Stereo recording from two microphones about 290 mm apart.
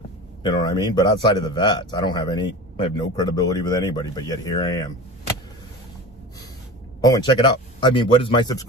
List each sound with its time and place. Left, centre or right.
0.4 s a man's voice: centre
7.0 s a man's voice: centre